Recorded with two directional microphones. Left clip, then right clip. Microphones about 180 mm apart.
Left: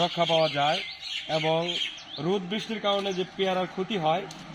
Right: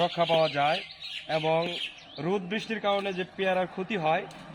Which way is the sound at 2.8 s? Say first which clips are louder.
Left 2 dB; 20° left (ahead or behind).